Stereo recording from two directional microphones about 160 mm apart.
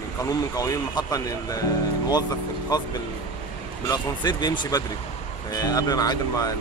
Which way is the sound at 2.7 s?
25° left (ahead or behind).